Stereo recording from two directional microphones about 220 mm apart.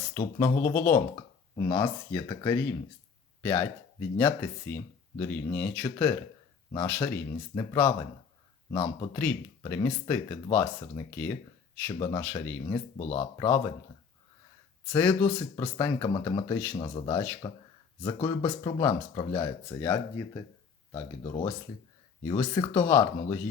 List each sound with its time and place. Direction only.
0.1 s speech: 15° left (ahead or behind)
11.9 s speech: 20° left (ahead or behind)
12.2 s speech: 10° left (ahead or behind)
13.0 s speech: 25° left (ahead or behind)
13.4 s speech: 15° left (ahead or behind)
14.9 s speech: 5° left (ahead or behind)
15.8 s speech: 20° left (ahead or behind)